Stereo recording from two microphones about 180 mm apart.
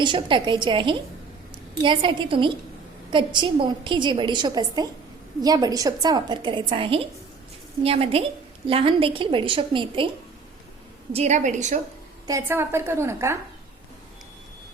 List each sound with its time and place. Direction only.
0.0 s a woman's voice: 25° right (ahead or behind)
11.1 s a woman's voice: 40° right (ahead or behind)
12.3 s a woman's voice: 15° right (ahead or behind)